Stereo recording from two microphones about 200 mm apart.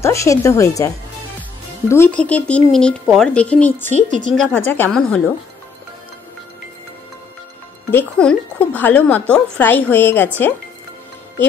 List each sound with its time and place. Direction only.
0.0 s speech: 15° left (ahead or behind)
3.9 s speech: 40° right (ahead or behind)
4.3 s speech: 5° left (ahead or behind)
7.9 s speech: 5° left (ahead or behind)